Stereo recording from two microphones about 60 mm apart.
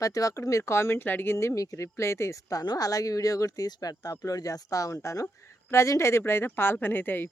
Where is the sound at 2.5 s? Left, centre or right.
Left.